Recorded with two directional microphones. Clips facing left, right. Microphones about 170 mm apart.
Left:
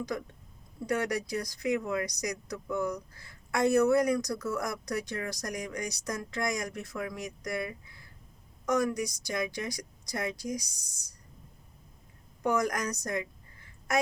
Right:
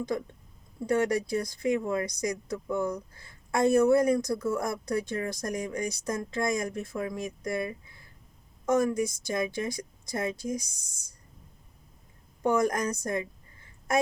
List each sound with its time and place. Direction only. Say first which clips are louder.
0.1 s a woman's voice: right 4 dB; 25° right (ahead or behind)
12.4 s a woman's voice: right 3 dB; 25° right (ahead or behind)